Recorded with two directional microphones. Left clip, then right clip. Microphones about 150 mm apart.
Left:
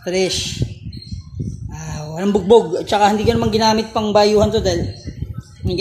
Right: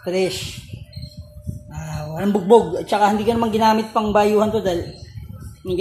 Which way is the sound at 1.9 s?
10° left (ahead or behind).